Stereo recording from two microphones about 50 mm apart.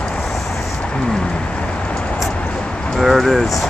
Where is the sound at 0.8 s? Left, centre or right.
Centre.